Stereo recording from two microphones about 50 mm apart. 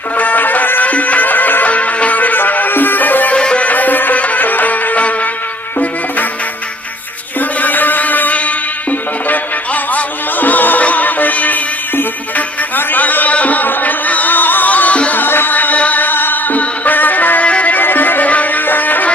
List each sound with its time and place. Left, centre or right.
0.1 s music: left
3.3 s music: left
3.6 s music: left
7.3 s music: left
9.9 s music: left
15.2 s music: left
17.5 s music: left
17.7 s music: left